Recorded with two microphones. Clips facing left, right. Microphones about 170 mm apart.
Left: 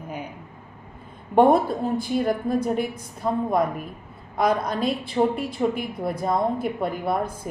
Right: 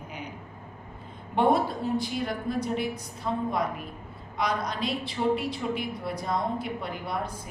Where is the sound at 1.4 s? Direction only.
50° left (ahead or behind).